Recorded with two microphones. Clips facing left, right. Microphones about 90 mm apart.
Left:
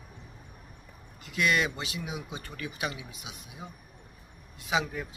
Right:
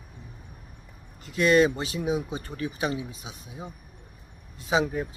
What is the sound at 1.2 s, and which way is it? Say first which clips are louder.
Speech: right 7 dB; 35° right (ahead or behind).